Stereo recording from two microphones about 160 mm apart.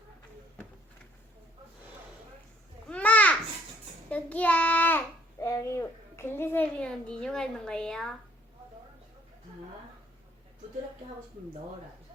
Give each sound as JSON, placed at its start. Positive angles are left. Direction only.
{"t": 2.9, "sound": "children playing", "side_deg": 10}
{"t": 4.1, "sound": "child singing", "side_deg": 10}